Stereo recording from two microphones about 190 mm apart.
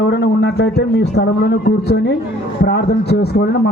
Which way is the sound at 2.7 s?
60° left (ahead or behind).